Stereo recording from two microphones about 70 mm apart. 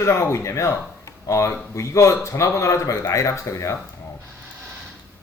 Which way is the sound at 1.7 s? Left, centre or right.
Left.